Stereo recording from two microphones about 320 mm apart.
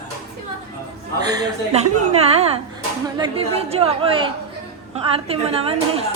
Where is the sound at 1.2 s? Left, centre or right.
Centre.